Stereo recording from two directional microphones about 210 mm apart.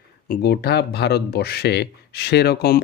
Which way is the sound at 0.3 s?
50° left (ahead or behind).